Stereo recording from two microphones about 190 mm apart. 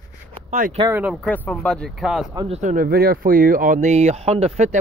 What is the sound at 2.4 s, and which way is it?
Speech, 35° right (ahead or behind).